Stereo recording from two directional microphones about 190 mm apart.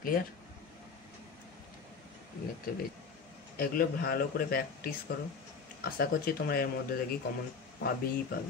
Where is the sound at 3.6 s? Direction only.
50° left (ahead or behind).